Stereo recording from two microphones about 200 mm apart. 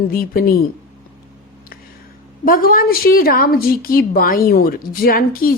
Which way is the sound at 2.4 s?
45° left (ahead or behind).